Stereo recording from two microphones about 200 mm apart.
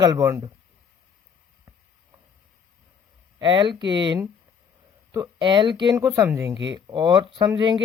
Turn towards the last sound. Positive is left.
turn(degrees=-20)  # may be behind; listen again after turning